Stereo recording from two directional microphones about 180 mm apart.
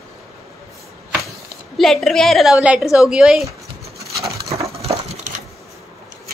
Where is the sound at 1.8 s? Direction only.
Centre (ahead or behind).